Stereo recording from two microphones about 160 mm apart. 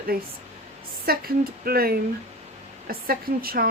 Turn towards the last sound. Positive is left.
turn(degrees=-70)  # may be behind; listen again after turning